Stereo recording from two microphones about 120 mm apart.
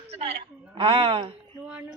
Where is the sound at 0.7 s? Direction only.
45° right (ahead or behind).